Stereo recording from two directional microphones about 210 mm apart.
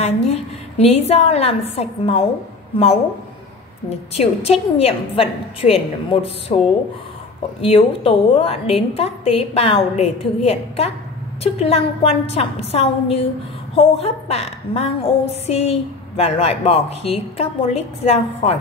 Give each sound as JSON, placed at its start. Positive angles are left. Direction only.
{"t": 0.0, "sound": "a woman's voice", "side_deg": 30}
{"t": 4.1, "sound": "a woman's voice", "side_deg": 30}